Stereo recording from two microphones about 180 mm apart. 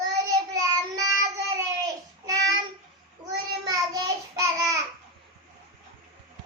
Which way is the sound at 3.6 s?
20° right (ahead or behind).